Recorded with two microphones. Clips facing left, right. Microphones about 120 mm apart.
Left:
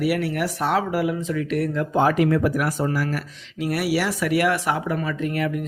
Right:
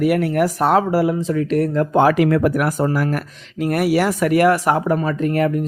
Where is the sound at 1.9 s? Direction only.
75° right (ahead or behind).